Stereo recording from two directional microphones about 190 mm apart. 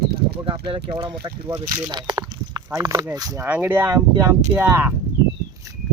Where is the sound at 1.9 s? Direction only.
20° right (ahead or behind).